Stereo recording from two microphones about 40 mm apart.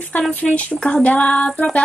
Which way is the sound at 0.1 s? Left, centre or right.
Left.